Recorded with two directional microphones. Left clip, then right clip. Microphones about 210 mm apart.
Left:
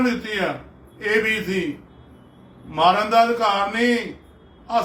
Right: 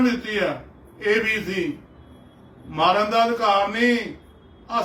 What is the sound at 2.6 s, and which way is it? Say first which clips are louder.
A man's voice: left 2 dB; 10° left (ahead or behind).